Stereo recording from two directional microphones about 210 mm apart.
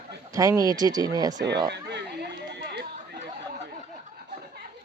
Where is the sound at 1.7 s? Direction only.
55° right (ahead or behind).